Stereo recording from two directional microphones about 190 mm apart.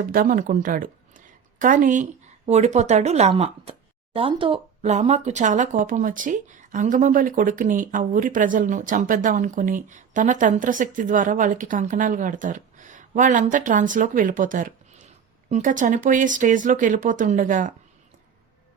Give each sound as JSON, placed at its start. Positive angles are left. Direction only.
{"t": 0.0, "sound": "speech", "side_deg": -45}